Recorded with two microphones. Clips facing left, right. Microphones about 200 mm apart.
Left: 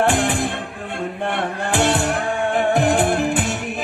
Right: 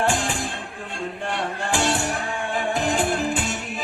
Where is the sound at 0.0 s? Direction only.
60° left (ahead or behind).